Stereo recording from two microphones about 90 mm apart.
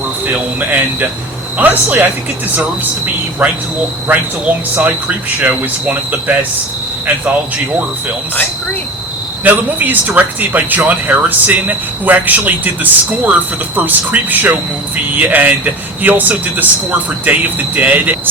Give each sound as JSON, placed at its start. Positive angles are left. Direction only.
{"t": 0.3, "sound": "speech", "side_deg": -20}
{"t": 3.4, "sound": "speech", "side_deg": -15}
{"t": 9.4, "sound": "speech", "side_deg": -20}